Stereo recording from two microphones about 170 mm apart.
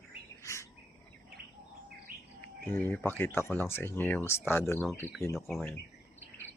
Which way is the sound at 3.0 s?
15° left (ahead or behind).